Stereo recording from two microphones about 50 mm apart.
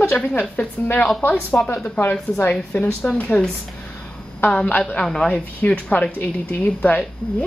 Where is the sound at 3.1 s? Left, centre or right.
Left.